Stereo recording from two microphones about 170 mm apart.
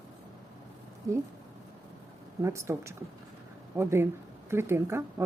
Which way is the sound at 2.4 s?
15° right (ahead or behind).